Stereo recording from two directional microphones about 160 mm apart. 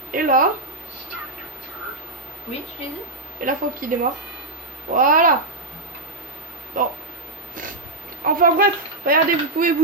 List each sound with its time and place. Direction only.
0.1 s speech: 55° right (ahead or behind)
3.4 s speech: 55° right (ahead or behind)
4.9 s speech: 55° right (ahead or behind)
6.8 s speech: 55° right (ahead or behind)
8.2 s speech: 65° right (ahead or behind)